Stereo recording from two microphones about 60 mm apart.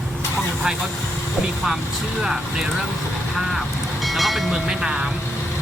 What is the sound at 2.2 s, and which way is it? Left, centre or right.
Speech, centre.